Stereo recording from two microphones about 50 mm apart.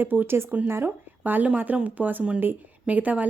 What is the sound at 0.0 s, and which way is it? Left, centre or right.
A woman's voice, right.